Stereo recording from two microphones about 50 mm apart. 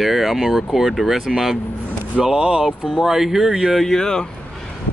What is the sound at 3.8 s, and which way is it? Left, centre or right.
Speech, centre.